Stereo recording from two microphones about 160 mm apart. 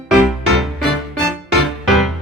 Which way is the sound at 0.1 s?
Centre (ahead or behind).